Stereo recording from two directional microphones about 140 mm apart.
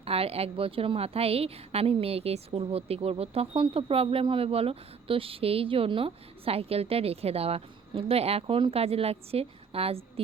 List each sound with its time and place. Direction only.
0.0 s a woman's voice: 45° right (ahead or behind)